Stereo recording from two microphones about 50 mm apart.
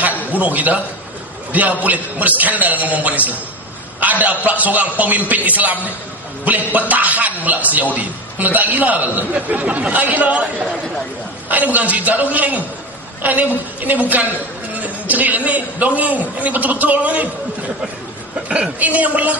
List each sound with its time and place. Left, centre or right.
0.4 s a man's voice: right
18.8 s a man's voice: right